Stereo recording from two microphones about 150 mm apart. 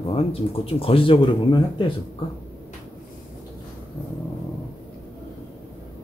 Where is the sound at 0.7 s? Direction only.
40° left (ahead or behind).